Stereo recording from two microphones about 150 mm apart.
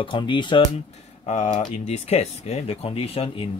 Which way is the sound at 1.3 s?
50° left (ahead or behind).